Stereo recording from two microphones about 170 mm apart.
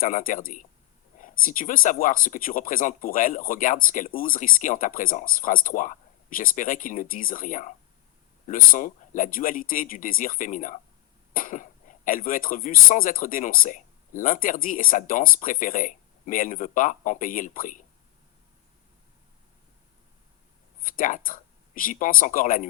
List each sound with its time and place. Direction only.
0.0 s speech: 55° left (ahead or behind)
20.8 s speech: 55° left (ahead or behind)